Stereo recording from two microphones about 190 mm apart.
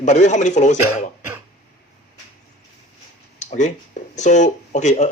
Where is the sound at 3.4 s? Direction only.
40° left (ahead or behind).